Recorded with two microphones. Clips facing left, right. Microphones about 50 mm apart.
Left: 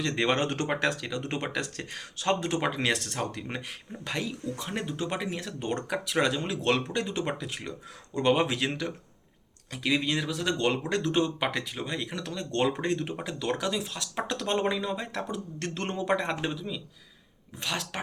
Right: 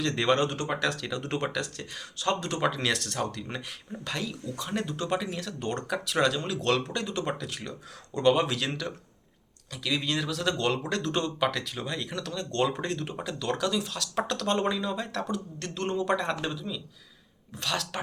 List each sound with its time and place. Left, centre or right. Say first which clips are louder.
0.0 s speech: right 1 dB; centre
0.4 s speech: left 1 dB; left
1.1 s speech: right 2 dB; centre
1.5 s speech: even; left
10.0 s speech: even; centre
11.3 s speech: right 2 dB; left
15.5 s speech: right 2 dB; left
16.0 s speech: even; centre